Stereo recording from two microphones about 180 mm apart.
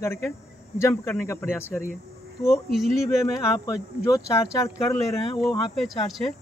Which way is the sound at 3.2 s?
20° left (ahead or behind).